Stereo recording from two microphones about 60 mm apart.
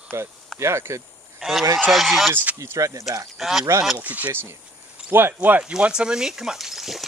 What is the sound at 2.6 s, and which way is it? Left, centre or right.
Speech, right.